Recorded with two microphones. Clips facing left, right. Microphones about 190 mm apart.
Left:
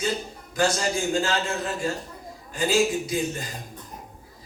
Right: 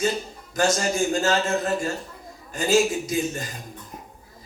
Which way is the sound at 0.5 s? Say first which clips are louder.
Right 1 dB; 45° right (ahead or behind).